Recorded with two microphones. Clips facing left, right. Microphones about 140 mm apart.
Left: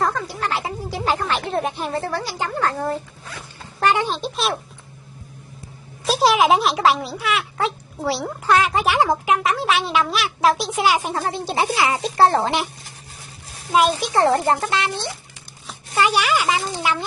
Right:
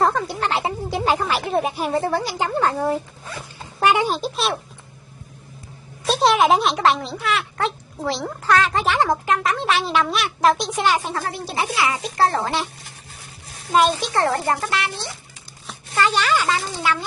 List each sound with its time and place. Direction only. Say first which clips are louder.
0.0 s speech: right 3 dB; 25° right (ahead or behind); by 1.9 s 5° right (ahead or behind)
1.9 s a woman's voice: right 3 dB; 20° right (ahead or behind); by 4.6 s centre (ahead or behind)
6.0 s speech: even; centre (ahead or behind); by 12.6 s 25° left (ahead or behind)
13.7 s speech: even; 5° left (ahead or behind); by 15.1 s 25° left (ahead or behind)
15.9 s speech: left 1 dB; 10° left (ahead or behind)